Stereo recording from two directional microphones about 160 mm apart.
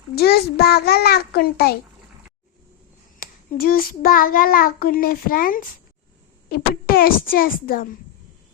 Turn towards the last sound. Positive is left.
turn(degrees=65)  # may be behind; listen again after turning